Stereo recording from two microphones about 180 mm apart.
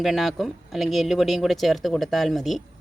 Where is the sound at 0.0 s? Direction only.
Centre (ahead or behind).